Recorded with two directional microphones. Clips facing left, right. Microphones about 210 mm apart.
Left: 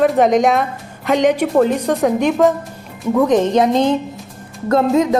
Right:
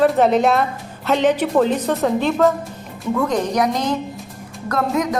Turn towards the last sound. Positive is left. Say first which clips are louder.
# left 6 dB
turn(degrees=25)  # may be behind; listen again after turning